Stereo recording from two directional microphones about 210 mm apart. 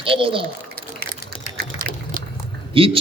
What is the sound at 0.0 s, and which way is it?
Speech, 25° right (ahead or behind).